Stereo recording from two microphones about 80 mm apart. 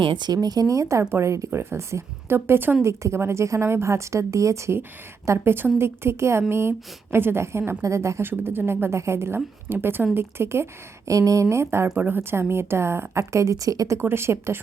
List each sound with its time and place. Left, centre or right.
0.0 s speech: right
0.4 s a woman's voice: right
8.3 s a woman's voice: right
11.1 s speech: right
11.4 s a woman's voice: right
14.0 s a woman's voice: right